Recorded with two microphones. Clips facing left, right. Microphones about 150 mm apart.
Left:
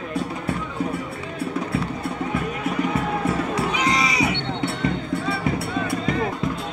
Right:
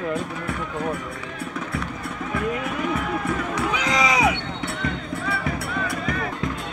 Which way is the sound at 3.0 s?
30° left (ahead or behind).